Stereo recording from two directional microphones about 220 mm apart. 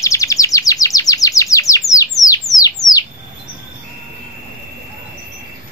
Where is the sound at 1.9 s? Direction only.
15° left (ahead or behind).